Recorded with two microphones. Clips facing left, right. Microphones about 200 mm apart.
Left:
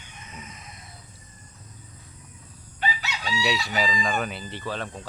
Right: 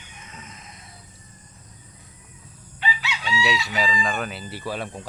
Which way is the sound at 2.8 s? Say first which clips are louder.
Even; 40° left (ahead or behind).